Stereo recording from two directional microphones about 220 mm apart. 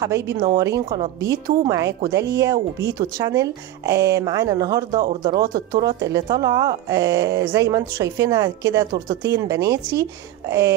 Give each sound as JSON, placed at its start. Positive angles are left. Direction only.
{"t": 0.0, "sound": "speech", "side_deg": -15}